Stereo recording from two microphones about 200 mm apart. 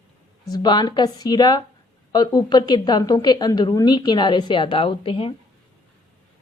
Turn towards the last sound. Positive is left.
turn(degrees=30)  # may be behind; listen again after turning